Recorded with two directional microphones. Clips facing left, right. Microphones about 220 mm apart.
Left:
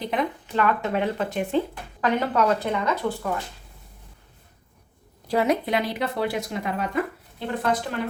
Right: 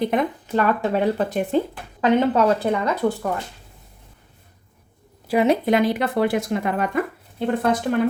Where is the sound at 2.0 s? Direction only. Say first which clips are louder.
Right 5 dB; 30° right (ahead or behind).